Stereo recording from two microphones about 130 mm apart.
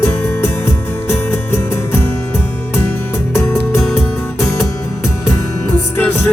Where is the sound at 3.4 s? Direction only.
20° left (ahead or behind).